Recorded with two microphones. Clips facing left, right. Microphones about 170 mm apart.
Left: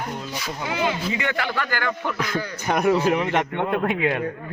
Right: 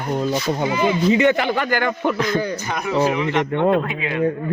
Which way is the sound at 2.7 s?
55° left (ahead or behind).